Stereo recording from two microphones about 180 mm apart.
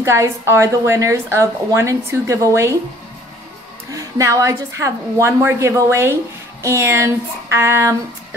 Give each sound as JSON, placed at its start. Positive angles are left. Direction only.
{"t": 0.0, "sound": "a woman's voice", "side_deg": -15}
{"t": 3.9, "sound": "a woman's voice", "side_deg": -15}